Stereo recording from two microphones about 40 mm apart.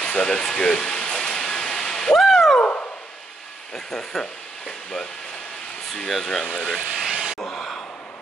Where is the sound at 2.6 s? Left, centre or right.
Left.